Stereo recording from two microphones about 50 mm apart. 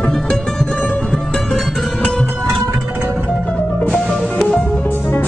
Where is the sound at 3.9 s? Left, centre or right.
Centre.